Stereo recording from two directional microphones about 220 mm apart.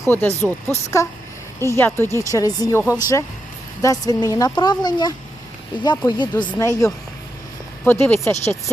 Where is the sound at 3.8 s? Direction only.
15° left (ahead or behind).